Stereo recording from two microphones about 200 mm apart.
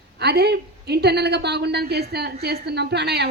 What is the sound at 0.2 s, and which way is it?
A woman's voice, 55° right (ahead or behind).